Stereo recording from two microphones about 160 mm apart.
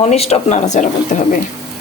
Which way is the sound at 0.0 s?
40° left (ahead or behind).